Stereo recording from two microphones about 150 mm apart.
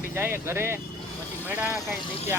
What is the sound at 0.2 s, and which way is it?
Speech, 15° right (ahead or behind).